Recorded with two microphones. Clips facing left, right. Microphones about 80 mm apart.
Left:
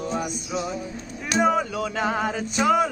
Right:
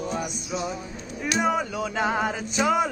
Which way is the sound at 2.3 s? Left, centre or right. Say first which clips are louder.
Left 2 dB; centre.